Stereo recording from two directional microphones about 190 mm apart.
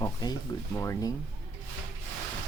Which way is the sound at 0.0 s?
20° left (ahead or behind).